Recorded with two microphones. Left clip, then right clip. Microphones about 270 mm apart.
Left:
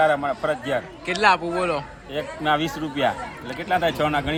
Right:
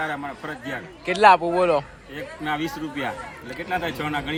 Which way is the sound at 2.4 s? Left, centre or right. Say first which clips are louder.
Left 4 dB; left.